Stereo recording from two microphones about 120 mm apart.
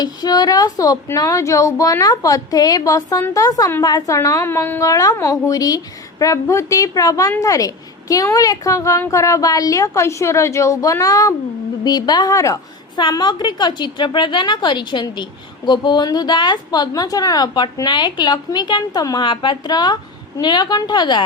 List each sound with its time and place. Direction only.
0.0 s a woman's voice: 35° left (ahead or behind)
13.0 s a woman's voice: 40° left (ahead or behind)